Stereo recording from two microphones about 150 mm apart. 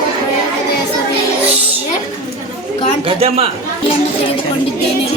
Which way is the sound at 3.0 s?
40° right (ahead or behind).